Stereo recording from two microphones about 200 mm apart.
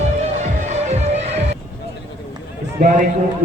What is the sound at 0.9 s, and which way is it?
Music, 35° right (ahead or behind).